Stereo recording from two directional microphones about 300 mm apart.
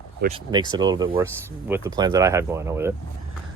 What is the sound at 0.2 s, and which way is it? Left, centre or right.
Speech, centre.